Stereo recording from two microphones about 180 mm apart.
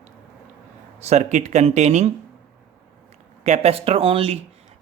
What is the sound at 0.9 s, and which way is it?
Speech, 40° right (ahead or behind).